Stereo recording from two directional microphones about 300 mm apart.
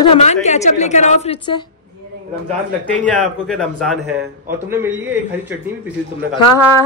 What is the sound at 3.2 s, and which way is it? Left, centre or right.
A man's voice, centre.